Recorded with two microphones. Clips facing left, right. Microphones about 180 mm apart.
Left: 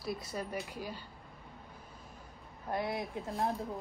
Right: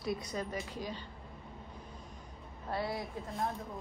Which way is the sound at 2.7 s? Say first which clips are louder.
Left 1 dB; 15° left (ahead or behind).